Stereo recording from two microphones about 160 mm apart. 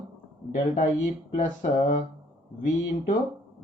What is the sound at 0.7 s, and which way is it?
Speech, 50° left (ahead or behind).